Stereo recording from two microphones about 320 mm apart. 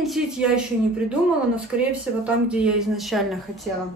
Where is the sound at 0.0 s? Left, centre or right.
Centre.